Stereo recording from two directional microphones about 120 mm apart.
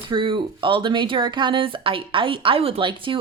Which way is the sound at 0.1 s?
45° right (ahead or behind).